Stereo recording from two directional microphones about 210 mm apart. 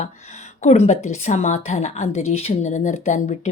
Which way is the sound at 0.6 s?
30° left (ahead or behind).